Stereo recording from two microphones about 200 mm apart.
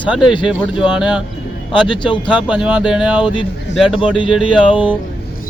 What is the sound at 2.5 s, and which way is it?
Speech, 5° right (ahead or behind).